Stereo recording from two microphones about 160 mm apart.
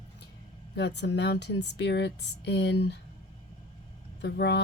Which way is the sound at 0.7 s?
90° left.